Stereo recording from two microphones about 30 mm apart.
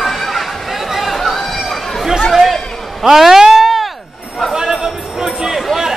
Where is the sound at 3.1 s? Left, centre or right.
Centre.